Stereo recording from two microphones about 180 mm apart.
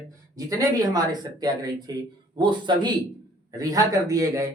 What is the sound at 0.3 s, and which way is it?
Speech, 20° right (ahead or behind).